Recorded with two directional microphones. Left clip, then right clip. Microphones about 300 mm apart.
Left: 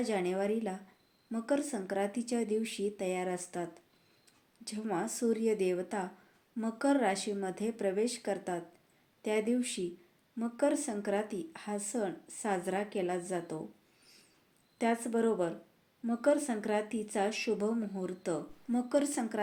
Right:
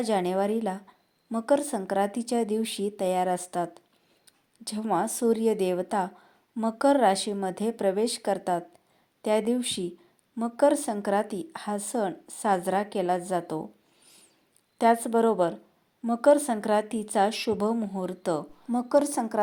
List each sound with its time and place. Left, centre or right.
0.0 s speech: right
14.8 s speech: right